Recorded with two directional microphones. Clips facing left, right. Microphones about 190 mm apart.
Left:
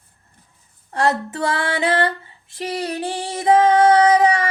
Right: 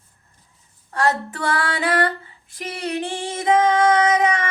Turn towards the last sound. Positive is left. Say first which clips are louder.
# left 4 dB
turn(degrees=35)  # may be behind; listen again after turning